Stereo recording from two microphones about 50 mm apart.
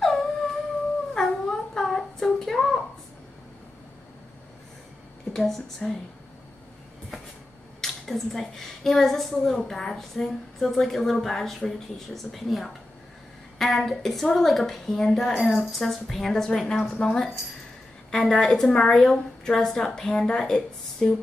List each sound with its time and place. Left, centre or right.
0.0 s music: centre
1.1 s a sound: centre
5.3 s a woman's voice: centre
7.8 s a woman's voice: centre
18.7 s a woman's voice: left